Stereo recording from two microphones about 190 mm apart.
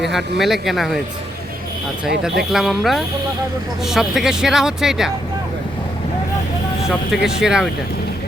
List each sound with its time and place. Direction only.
0.0 s speech: centre (ahead or behind)
2.5 s speech: centre (ahead or behind)
7.1 s speech: 5° right (ahead or behind)